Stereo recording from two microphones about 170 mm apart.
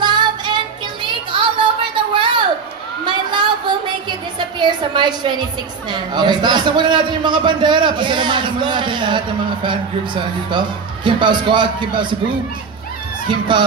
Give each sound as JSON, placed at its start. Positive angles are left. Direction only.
{"t": 0.0, "sound": "child singing", "side_deg": -25}
{"t": 1.0, "sound": "a sound", "side_deg": -30}
{"t": 4.4, "sound": "a woman's voice", "side_deg": -25}
{"t": 13.3, "sound": "a man's voice", "side_deg": -25}